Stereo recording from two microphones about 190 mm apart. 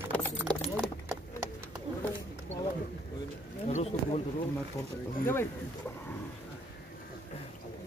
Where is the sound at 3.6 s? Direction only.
35° left (ahead or behind).